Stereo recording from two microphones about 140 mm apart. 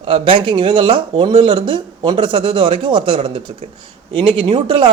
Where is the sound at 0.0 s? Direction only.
40° right (ahead or behind).